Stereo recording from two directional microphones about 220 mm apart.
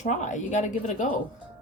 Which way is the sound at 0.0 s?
35° left (ahead or behind).